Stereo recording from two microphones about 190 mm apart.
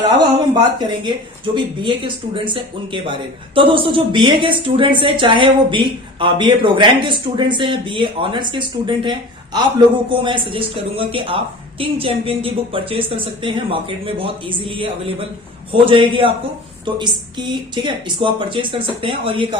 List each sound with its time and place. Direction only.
0.5 s a woman's voice: 25° right (ahead or behind)